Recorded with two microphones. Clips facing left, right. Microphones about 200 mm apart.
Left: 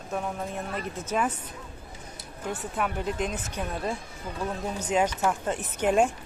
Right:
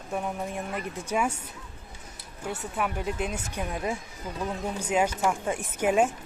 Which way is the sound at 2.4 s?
10° right (ahead or behind).